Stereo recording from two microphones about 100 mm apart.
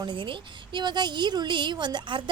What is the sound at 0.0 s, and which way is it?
A woman's voice, 55° right (ahead or behind).